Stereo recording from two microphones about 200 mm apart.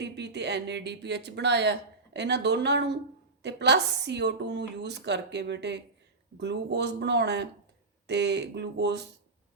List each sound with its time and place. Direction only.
0.0 s speech: 60° right (ahead or behind)